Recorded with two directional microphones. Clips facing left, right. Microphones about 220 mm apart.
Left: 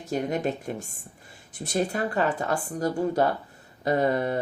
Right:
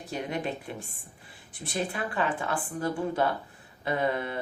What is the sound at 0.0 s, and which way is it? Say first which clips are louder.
Speech: left 6 dB; 45° left (ahead or behind).